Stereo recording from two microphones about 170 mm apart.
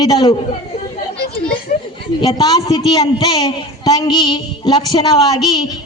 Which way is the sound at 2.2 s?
25° left (ahead or behind).